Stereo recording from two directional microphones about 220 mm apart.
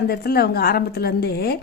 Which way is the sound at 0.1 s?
45° left (ahead or behind).